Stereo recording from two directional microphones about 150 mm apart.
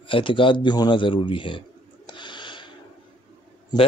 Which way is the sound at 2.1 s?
30° left (ahead or behind).